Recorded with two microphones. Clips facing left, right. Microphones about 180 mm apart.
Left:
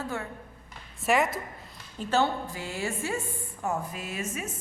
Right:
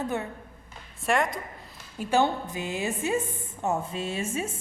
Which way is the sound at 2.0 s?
15° right (ahead or behind).